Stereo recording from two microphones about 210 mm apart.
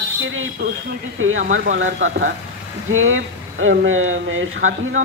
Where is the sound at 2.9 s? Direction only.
75° right (ahead or behind).